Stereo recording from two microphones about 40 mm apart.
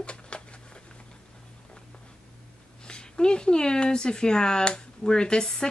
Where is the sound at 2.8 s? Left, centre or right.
Left.